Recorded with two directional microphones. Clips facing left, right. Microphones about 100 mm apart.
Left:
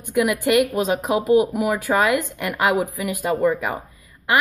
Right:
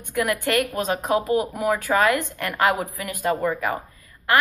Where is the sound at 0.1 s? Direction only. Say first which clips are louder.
Left 4 dB; 10° left (ahead or behind).